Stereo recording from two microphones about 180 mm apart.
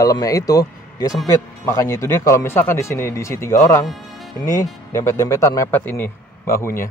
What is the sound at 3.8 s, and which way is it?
Music, centre (ahead or behind).